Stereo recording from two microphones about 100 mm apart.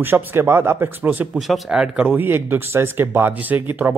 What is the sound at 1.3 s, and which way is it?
Speech, centre (ahead or behind).